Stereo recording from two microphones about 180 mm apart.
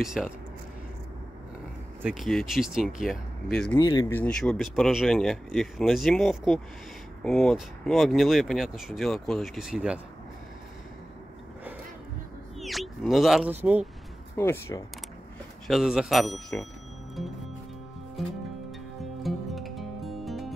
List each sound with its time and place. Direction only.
0.0 s speech: centre (ahead or behind)
2.0 s speech: centre (ahead or behind)
3.7 s speech: 20° left (ahead or behind)
4.1 s speech: 5° left (ahead or behind)
12.5 s speech: centre (ahead or behind)
14.3 s speech: 10° left (ahead or behind)
15.6 s speech: centre (ahead or behind)
19.2 s music: centre (ahead or behind)